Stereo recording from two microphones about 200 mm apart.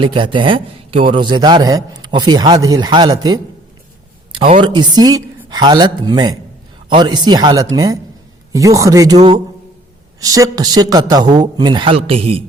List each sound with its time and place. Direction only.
0.0 s a man's voice: 25° right (ahead or behind)